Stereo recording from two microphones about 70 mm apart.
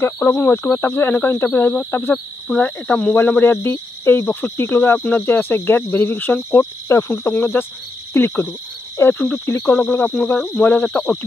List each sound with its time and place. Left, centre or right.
0.0 s cricket: left
4.3 s speech: left
6.9 s cricket: left
8.1 s speech: left
9.2 s speech: left
9.6 s cricket: left
10.6 s speech: left